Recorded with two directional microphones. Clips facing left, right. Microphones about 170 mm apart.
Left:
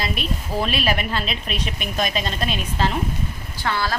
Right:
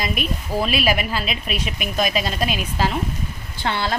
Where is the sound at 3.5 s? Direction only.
25° right (ahead or behind).